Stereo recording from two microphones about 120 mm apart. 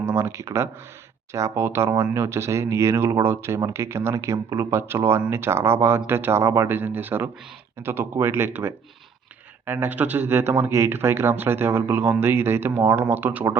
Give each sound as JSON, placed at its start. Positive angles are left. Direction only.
{"t": 0.0, "sound": "speech", "side_deg": -20}